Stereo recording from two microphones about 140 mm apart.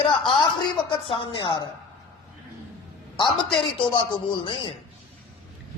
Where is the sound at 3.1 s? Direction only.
35° left (ahead or behind).